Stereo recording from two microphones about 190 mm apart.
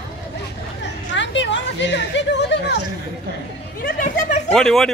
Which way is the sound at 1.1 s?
70° left (ahead or behind).